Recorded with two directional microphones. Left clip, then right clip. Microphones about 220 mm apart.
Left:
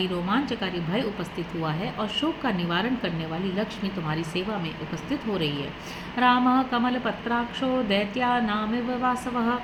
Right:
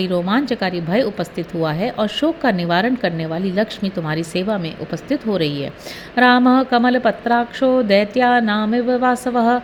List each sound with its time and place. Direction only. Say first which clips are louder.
0.0 s speech: right 7 dB; 45° right (ahead or behind)
5.3 s speech: right 7 dB; 40° right (ahead or behind)